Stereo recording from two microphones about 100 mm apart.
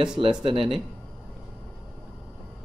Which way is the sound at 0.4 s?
60° right (ahead or behind).